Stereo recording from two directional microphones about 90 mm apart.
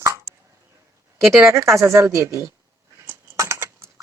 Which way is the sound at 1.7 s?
35° right (ahead or behind).